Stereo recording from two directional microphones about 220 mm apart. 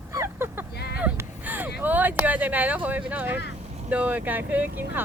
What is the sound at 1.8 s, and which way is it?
Speech, 10° right (ahead or behind).